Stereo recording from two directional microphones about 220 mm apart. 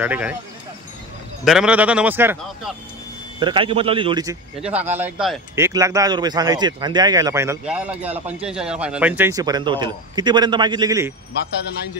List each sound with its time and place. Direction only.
0.0 s speech: 5° right (ahead or behind)
1.4 s speech: 5° right (ahead or behind)
3.3 s speech: 20° right (ahead or behind)
4.6 s speech: 5° right (ahead or behind)
5.7 s speech: 15° right (ahead or behind)